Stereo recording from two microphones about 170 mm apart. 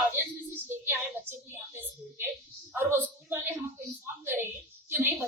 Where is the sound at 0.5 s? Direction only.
15° right (ahead or behind).